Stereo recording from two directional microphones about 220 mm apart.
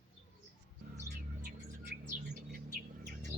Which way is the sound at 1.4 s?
50° right (ahead or behind).